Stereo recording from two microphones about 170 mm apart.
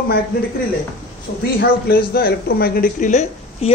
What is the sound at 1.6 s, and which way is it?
A woman's voice, 65° left (ahead or behind).